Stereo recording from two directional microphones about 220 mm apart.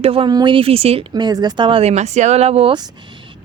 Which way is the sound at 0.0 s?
25° right (ahead or behind).